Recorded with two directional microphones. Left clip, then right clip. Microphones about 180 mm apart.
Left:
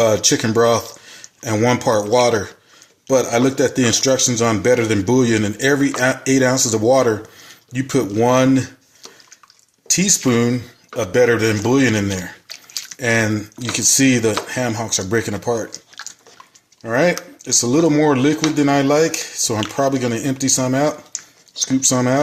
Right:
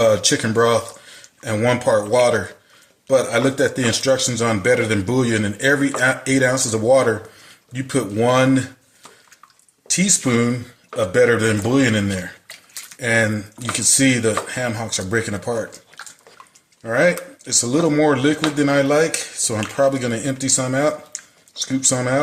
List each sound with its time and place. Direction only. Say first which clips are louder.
0.0 s speech: left 1 dB; 40° left (ahead or behind)
9.8 s speech: left 2 dB; 40° left (ahead or behind)
16.8 s speech: even; 40° left (ahead or behind)